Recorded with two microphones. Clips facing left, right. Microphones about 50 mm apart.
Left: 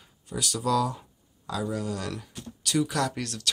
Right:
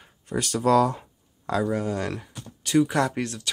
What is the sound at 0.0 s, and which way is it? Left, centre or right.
Speech, right.